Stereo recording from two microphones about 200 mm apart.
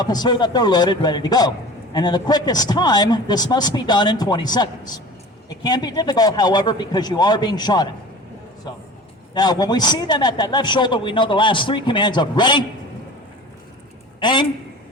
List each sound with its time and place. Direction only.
0.0 s a man's voice: 20° left (ahead or behind)
9.3 s a man's voice: 20° left (ahead or behind)
14.2 s a man's voice: 25° left (ahead or behind)